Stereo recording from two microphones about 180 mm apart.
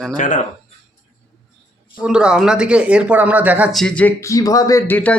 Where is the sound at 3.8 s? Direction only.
10° left (ahead or behind).